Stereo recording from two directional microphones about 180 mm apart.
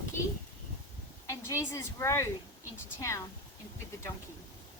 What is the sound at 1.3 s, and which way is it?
Speech, 15° left (ahead or behind).